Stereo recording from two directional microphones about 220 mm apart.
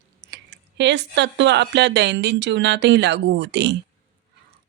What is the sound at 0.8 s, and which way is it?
Speech, 55° right (ahead or behind).